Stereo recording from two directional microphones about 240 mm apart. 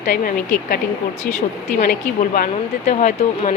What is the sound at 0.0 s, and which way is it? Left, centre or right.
A woman's voice, left.